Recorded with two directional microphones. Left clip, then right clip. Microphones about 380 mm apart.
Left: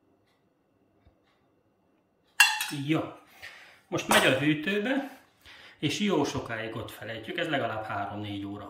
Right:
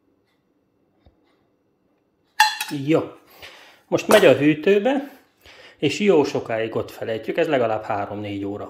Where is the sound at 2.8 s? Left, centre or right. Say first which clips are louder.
Right 10 dB; centre.